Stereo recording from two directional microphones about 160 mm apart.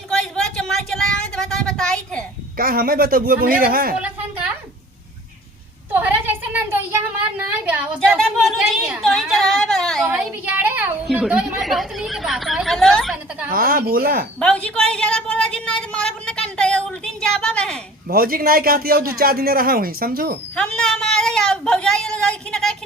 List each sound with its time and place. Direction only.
0.3 s a sound: 5° left (ahead or behind)
2.6 s a woman's voice: 65° right (ahead or behind)
5.9 s a sound: 10° right (ahead or behind)
7.6 s a woman's voice: 10° right (ahead or behind)
13.5 s a woman's voice: 65° right (ahead or behind)
14.3 s a woman's voice: 5° left (ahead or behind)
18.1 s a man's voice: 65° right (ahead or behind)
20.6 s a woman's voice: 5° left (ahead or behind)